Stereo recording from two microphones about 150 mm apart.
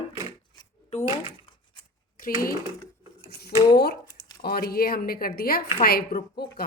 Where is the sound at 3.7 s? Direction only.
90° left.